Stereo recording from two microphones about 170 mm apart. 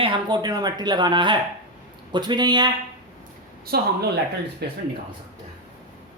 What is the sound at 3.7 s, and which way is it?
Speech, 65° right (ahead or behind).